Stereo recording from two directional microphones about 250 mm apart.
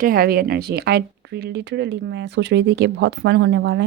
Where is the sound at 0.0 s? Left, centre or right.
Right.